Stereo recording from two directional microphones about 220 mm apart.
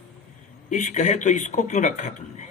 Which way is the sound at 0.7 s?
35° left (ahead or behind).